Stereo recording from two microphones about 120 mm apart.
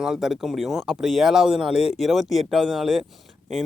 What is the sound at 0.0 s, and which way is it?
Speech, 5° right (ahead or behind).